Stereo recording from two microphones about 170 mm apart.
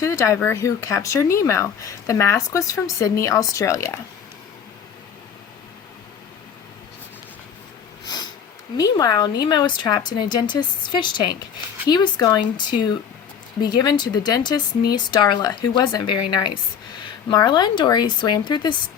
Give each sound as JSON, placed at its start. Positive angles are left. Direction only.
{"t": 0.0, "sound": "speech", "side_deg": 15}
{"t": 8.0, "sound": "sniff", "side_deg": 25}
{"t": 8.8, "sound": "speech", "side_deg": 20}